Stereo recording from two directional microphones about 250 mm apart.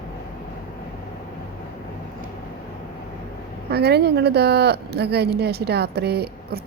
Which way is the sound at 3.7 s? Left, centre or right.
Right.